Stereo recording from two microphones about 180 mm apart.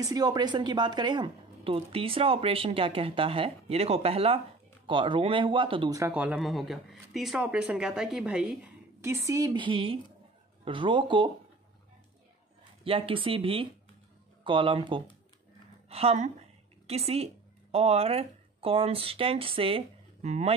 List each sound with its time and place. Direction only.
0.0 s speech: 20° right (ahead or behind)
5.9 s speech: 10° right (ahead or behind)
9.0 s speech: 15° right (ahead or behind)
12.8 s speech: 30° right (ahead or behind)